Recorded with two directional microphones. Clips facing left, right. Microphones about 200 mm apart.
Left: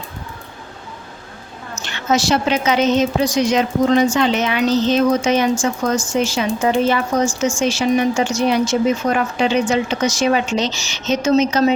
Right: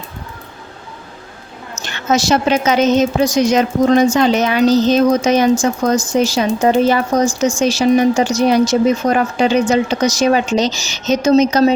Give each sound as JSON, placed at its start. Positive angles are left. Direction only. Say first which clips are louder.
{"t": 1.8, "sound": "a woman's voice", "louder": "right 2 dB", "side_deg": -45}